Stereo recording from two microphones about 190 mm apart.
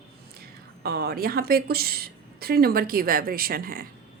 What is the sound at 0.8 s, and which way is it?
A woman's voice, 55° right (ahead or behind).